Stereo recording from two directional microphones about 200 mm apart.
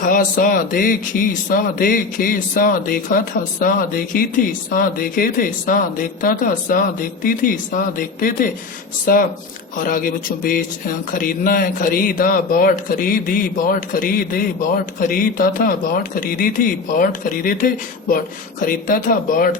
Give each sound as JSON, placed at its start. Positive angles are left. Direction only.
{"t": 0.0, "sound": "a man's voice", "side_deg": 40}